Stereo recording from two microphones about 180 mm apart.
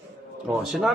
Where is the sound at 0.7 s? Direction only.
Centre (ahead or behind).